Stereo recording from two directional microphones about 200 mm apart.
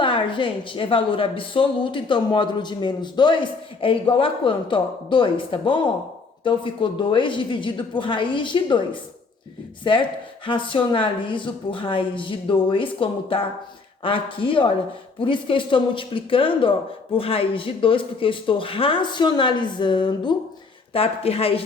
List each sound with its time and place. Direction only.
0.0 s a woman's voice: 25° left (ahead or behind)